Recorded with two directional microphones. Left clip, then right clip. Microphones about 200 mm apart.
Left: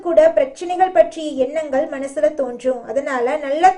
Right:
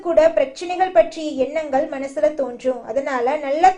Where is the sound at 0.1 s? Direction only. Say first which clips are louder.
Left 2 dB; 15° left (ahead or behind).